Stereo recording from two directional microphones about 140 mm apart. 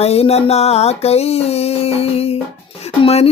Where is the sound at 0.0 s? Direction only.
45° left (ahead or behind).